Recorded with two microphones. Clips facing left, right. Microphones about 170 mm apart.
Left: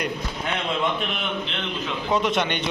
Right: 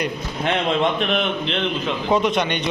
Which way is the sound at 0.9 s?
75° right (ahead or behind).